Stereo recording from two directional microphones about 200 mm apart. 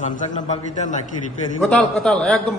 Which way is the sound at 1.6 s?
5° left (ahead or behind).